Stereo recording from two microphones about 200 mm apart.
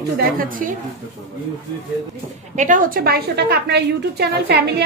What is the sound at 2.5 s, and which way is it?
A woman's voice, 40° right (ahead or behind).